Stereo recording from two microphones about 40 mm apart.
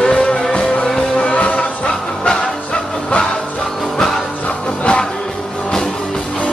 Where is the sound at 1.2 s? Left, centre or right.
Left.